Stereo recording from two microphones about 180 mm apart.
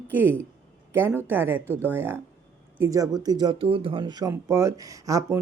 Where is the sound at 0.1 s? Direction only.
10° right (ahead or behind).